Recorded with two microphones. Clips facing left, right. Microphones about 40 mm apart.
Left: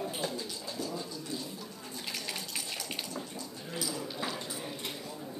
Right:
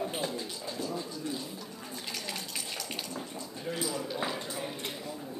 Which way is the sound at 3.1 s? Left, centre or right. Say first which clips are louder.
Right 1 dB; centre.